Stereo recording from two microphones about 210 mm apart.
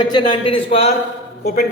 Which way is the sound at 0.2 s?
25° left (ahead or behind).